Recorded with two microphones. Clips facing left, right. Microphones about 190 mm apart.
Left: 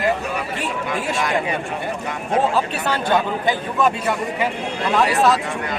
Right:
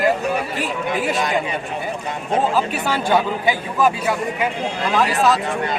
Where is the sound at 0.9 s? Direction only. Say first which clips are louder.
Right 2 dB; 25° right (ahead or behind).